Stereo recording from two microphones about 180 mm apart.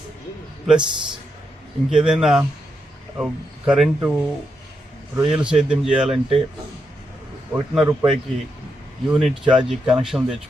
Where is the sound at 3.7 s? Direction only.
5° right (ahead or behind).